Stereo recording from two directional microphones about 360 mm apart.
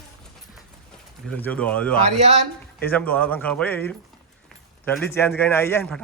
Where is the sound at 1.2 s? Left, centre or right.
Centre.